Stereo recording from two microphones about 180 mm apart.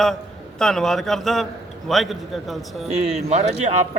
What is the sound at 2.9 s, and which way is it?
Speech, 35° right (ahead or behind).